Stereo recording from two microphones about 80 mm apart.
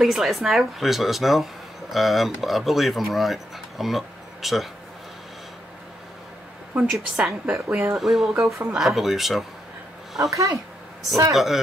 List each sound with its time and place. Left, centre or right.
0.0 s speech: centre
6.7 s a woman's voice: centre
7.5 s speech: right
8.0 s speech: centre
11.3 s speech: centre